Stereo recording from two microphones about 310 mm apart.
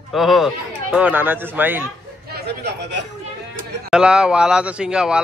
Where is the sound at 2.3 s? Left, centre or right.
Right.